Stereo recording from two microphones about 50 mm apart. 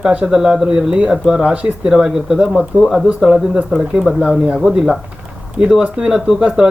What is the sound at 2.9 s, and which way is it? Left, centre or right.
Speech, centre.